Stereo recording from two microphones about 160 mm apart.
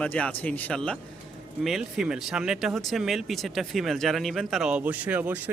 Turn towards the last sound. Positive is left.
turn(degrees=-10)  # may be behind; listen again after turning